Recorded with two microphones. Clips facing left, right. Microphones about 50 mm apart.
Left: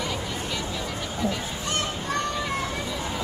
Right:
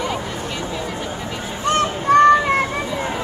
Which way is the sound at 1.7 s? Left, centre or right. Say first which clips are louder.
Right 14 dB; right.